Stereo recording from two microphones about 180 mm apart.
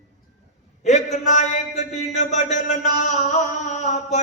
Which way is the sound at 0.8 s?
40° left (ahead or behind).